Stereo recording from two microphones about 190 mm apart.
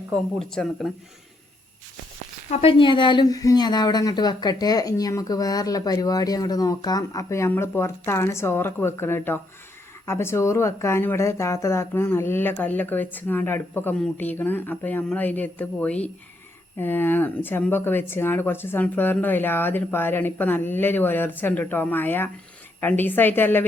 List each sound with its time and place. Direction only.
0.3 s speech: centre (ahead or behind)
2.5 s speech: 30° left (ahead or behind); by 23.6 s 10° left (ahead or behind)